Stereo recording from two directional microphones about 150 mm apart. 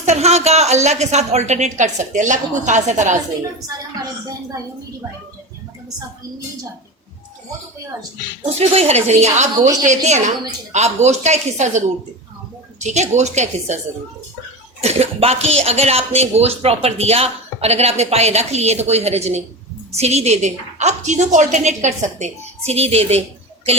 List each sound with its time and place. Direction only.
0.0 s speech: 45° right (ahead or behind)
8.4 s speech: 45° right (ahead or behind)
12.8 s speech: 50° right (ahead or behind)
14.8 s a child's voice: 45° right (ahead or behind)